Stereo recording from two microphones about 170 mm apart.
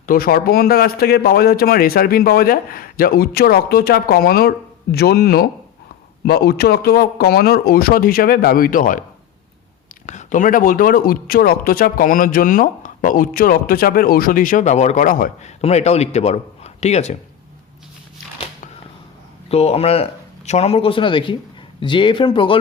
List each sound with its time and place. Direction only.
0.0 s a man's voice: 60° left (ahead or behind)
10.1 s speech: 45° left (ahead or behind)
19.5 s speech: 35° left (ahead or behind)